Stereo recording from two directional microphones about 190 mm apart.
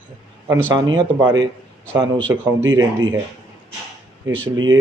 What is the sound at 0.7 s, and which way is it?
A man's voice, 20° right (ahead or behind).